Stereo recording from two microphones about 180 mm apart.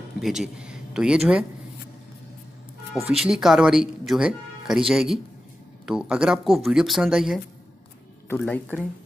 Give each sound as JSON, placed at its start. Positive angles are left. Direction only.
{"t": 0.2, "sound": "speech", "side_deg": 0}
{"t": 2.9, "sound": "speech", "side_deg": 0}
{"t": 8.4, "sound": "speech", "side_deg": 10}